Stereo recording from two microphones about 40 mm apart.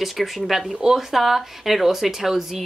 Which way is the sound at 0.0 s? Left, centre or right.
Centre.